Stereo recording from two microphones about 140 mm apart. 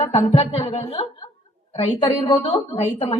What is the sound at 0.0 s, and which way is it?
A woman's voice, 45° left (ahead or behind).